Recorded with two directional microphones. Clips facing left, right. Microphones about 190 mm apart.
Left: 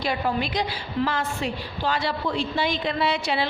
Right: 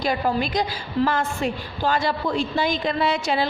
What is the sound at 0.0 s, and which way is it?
A woman's voice, 45° right (ahead or behind).